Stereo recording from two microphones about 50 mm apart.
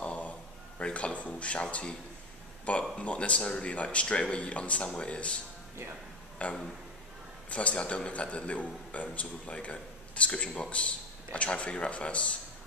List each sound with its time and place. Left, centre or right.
0.0 s a sound: left
0.7 s a man's voice: left
6.4 s a man's voice: left